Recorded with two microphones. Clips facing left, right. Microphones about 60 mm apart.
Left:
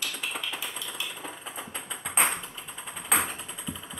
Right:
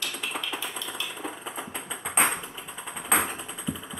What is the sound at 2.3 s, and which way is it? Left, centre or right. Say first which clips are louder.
Music: right 2 dB; centre.